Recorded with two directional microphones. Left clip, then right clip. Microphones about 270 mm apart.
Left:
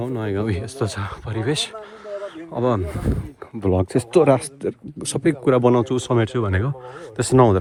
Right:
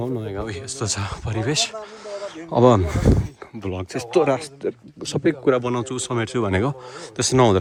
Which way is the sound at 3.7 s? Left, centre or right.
Left.